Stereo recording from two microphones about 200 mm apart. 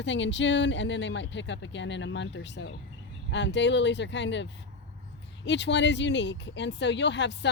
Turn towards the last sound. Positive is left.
turn(degrees=60)  # may be behind; listen again after turning